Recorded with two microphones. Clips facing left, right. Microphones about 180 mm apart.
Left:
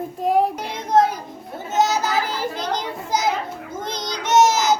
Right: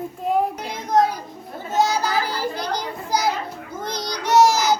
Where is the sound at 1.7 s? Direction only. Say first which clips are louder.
Left 1 dB; 20° left (ahead or behind).